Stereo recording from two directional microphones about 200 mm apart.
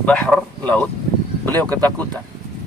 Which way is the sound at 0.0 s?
5° left (ahead or behind).